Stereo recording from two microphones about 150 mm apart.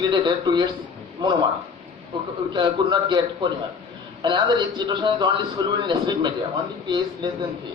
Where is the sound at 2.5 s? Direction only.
30° right (ahead or behind).